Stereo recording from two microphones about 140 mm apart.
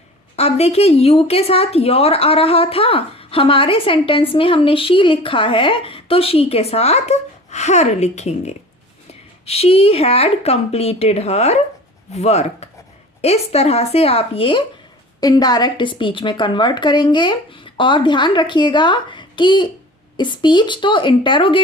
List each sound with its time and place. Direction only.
0.3 s a woman's voice: 50° left (ahead or behind)
15.2 s a woman's voice: 30° left (ahead or behind)